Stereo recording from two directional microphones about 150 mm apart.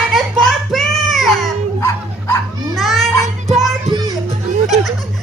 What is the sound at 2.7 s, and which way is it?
Children playing, centre (ahead or behind).